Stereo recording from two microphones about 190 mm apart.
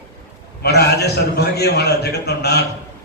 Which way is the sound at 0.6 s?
60° left (ahead or behind).